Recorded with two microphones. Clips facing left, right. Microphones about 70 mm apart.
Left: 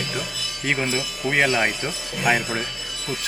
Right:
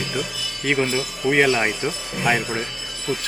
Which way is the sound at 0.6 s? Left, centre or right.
Centre.